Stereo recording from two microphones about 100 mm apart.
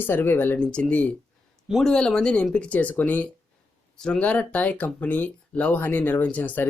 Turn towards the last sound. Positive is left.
turn(degrees=15)  # may be behind; listen again after turning